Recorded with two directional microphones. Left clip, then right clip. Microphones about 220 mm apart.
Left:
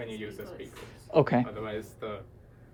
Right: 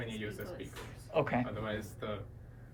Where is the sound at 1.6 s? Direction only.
20° left (ahead or behind).